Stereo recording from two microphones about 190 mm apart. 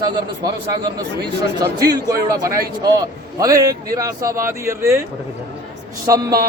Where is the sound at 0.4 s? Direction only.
20° right (ahead or behind).